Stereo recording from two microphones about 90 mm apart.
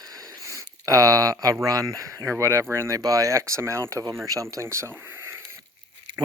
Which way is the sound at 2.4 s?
30° right (ahead or behind).